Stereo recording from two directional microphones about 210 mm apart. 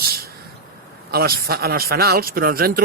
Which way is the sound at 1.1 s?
45° right (ahead or behind).